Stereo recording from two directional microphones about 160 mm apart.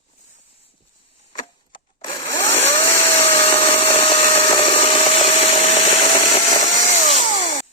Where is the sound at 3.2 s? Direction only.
40° left (ahead or behind).